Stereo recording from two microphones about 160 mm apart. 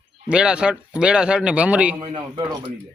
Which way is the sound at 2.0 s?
30° right (ahead or behind).